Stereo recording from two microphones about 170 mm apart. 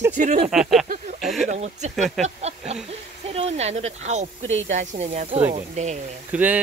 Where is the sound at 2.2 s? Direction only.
40° right (ahead or behind).